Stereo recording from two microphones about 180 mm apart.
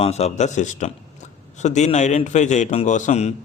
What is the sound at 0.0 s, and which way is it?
A man's voice, 35° left (ahead or behind).